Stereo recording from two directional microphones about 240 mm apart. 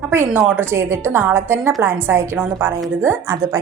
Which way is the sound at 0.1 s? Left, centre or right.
Centre.